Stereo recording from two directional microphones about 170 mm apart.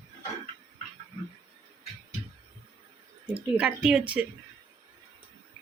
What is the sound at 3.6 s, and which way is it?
Speech, 5° right (ahead or behind).